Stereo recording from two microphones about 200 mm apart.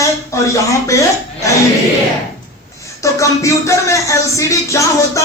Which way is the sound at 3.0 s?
15° left (ahead or behind).